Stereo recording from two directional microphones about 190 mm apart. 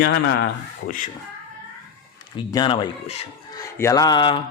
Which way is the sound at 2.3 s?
25° left (ahead or behind).